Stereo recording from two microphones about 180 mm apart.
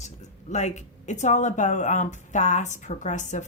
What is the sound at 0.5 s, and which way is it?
A woman's voice, 40° left (ahead or behind).